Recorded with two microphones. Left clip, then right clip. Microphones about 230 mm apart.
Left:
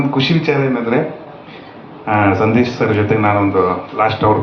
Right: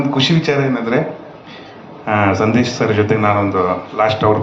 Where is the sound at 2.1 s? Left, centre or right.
Right.